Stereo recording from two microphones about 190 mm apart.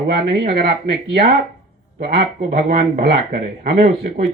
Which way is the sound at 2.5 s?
45° right (ahead or behind).